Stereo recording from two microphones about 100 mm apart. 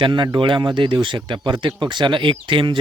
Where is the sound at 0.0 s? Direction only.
50° right (ahead or behind).